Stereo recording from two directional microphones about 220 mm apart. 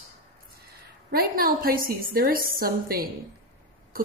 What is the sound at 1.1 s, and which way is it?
A woman's voice, 45° right (ahead or behind).